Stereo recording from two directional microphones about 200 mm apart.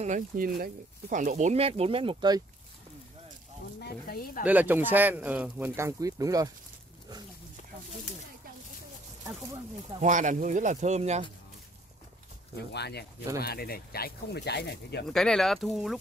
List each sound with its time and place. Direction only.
0.0 s speech: 40° right (ahead or behind); by 2.4 s 20° right (ahead or behind)
3.8 s speech: 50° left (ahead or behind)
4.5 s speech: 10° right (ahead or behind)
9.9 s speech: 40° right (ahead or behind)
12.7 s speech: 55° left (ahead or behind)
15.0 s speech: centre (ahead or behind)